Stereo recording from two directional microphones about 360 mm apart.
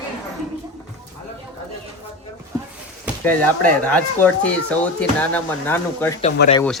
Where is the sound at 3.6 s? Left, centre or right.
Centre.